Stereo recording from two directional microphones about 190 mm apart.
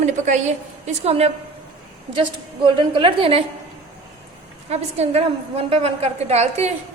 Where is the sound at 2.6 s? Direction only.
30° right (ahead or behind).